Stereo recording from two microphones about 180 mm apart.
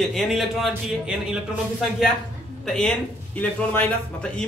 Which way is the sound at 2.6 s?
5° left (ahead or behind).